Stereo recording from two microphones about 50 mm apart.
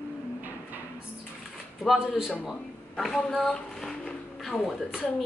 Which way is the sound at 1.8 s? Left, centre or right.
Centre.